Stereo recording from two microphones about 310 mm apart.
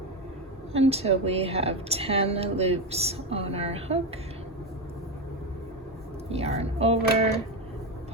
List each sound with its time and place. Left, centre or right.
0.7 s a woman's voice: centre
6.2 s a woman's voice: centre